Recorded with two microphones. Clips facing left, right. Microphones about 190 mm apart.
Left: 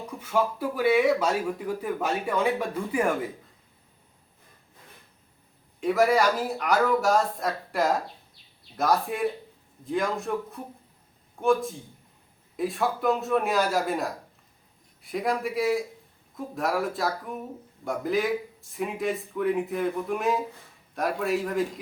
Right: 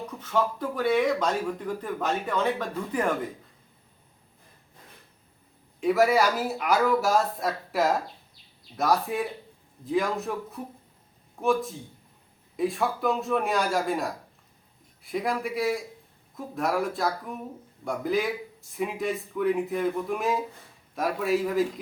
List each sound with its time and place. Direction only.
0.2 s speech: 10° left (ahead or behind)
5.8 s speech: centre (ahead or behind)